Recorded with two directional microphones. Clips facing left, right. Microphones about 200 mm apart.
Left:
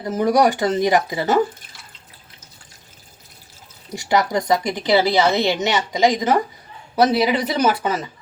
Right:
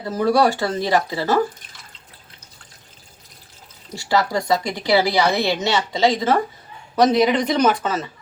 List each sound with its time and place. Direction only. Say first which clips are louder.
0.0 s speech: left 1 dB; 20° left (ahead or behind)
3.9 s a woman's voice: left 1 dB; 20° left (ahead or behind)